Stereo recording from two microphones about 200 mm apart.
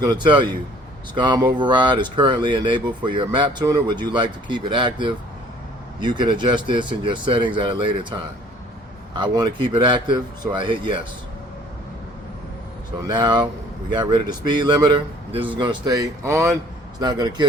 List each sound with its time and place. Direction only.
0.0 s speech: 20° right (ahead or behind)
13.1 s speech: 20° right (ahead or behind)